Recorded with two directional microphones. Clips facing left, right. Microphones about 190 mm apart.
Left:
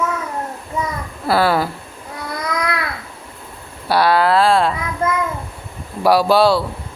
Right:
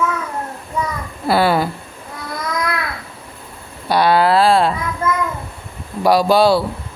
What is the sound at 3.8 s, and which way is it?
Speech, 5° left (ahead or behind).